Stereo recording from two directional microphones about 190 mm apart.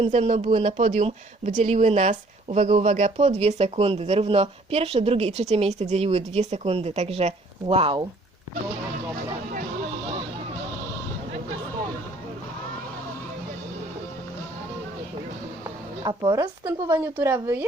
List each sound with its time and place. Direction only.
0.0 s speech: 35° right (ahead or behind)
16.0 s speech: 20° right (ahead or behind)